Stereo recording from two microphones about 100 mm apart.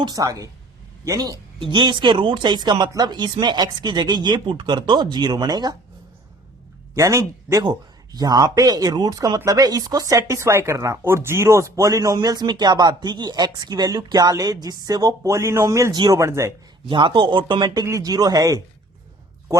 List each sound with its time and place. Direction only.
0.0 s speech: 35° right (ahead or behind)
1.5 s speech: 55° right (ahead or behind)
6.9 s a man's voice: 30° right (ahead or behind)
7.6 s speech: 45° right (ahead or behind)
16.8 s speech: 55° right (ahead or behind)
17.8 s speech: 35° right (ahead or behind)